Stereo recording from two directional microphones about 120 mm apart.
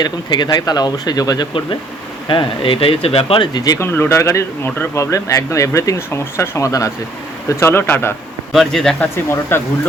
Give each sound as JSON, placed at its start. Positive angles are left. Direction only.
{"t": 0.0, "sound": "speech", "side_deg": 40}
{"t": 2.2, "sound": "speech", "side_deg": 45}
{"t": 3.6, "sound": "speech", "side_deg": 25}
{"t": 8.5, "sound": "speech", "side_deg": 5}
{"t": 9.1, "sound": "speech", "side_deg": 20}